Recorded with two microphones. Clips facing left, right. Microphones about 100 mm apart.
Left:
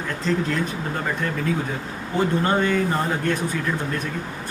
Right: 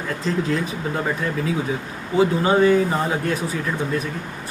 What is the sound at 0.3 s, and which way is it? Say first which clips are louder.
Speech: even; 5° right (ahead or behind).